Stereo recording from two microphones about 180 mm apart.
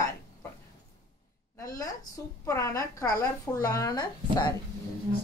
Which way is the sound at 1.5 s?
15° left (ahead or behind).